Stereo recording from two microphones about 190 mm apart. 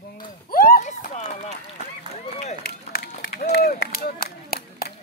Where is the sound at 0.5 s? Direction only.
50° left (ahead or behind).